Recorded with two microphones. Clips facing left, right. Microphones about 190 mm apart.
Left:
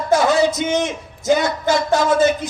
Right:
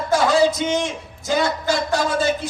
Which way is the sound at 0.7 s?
20° left (ahead or behind).